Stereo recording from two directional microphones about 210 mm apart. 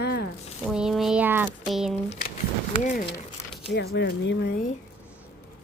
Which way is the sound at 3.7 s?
55° left (ahead or behind).